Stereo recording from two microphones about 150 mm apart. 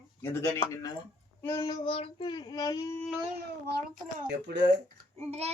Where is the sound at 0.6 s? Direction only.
25° left (ahead or behind).